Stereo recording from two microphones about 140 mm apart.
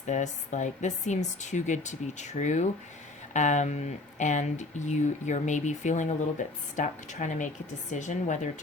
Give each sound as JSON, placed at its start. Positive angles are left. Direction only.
{"t": 0.0, "sound": "speech", "side_deg": 60}